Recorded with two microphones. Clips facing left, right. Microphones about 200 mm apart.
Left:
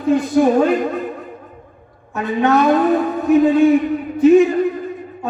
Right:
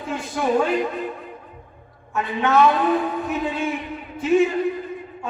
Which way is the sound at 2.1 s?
40° left (ahead or behind).